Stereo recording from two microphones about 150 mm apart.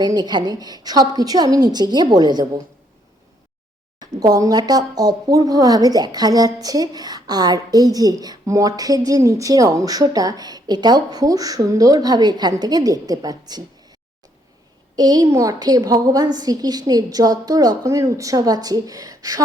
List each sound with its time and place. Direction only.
0.0 s speech: 25° right (ahead or behind)
4.0 s speech: 25° right (ahead or behind)
14.9 s speech: 25° right (ahead or behind)